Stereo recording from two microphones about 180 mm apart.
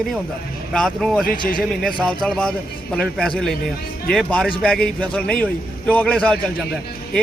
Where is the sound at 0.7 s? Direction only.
5° left (ahead or behind).